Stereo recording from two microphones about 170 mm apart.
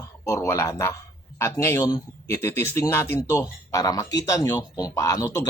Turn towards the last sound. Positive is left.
turn(degrees=15)  # may be behind; listen again after turning